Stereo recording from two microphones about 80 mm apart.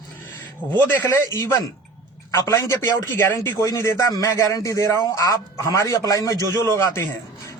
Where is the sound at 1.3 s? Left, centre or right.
Left.